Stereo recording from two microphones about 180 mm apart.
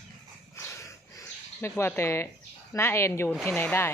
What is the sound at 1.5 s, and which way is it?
Speech, 15° left (ahead or behind).